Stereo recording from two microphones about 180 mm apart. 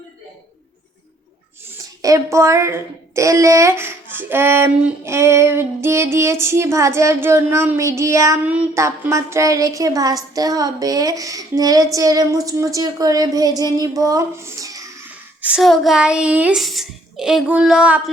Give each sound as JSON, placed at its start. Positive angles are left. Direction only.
{"t": 2.0, "sound": "a woman's voice", "side_deg": -15}
{"t": 15.4, "sound": "a child's voice", "side_deg": -5}